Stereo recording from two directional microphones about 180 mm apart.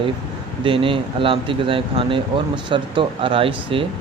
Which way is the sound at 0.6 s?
30° right (ahead or behind).